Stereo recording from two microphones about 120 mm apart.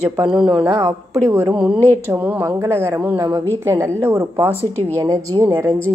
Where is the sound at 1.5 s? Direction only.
5° right (ahead or behind).